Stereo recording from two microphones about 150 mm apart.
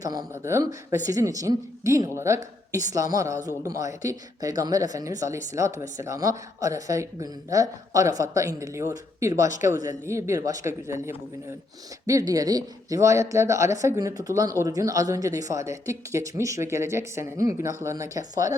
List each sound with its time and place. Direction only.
0.0 s speech: 25° right (ahead or behind)